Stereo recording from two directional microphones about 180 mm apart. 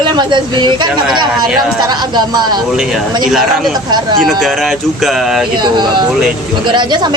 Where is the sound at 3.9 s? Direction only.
25° right (ahead or behind).